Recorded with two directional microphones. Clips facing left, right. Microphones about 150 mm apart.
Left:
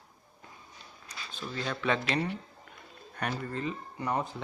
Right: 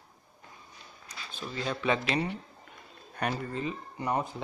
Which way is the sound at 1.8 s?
10° right (ahead or behind).